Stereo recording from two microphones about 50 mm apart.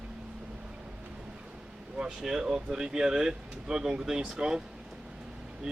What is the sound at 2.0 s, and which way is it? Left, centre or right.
Speech, centre.